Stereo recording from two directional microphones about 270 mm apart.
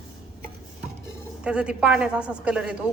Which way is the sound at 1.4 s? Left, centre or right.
Centre.